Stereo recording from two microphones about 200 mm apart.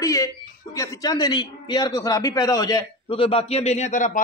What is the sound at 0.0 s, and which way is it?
A man's voice, 15° left (ahead or behind).